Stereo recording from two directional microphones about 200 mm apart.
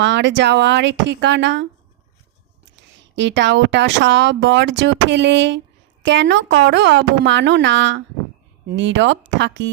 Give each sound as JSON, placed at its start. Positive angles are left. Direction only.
{"t": 0.0, "sound": "speech", "side_deg": -60}
{"t": 2.9, "sound": "speech", "side_deg": -65}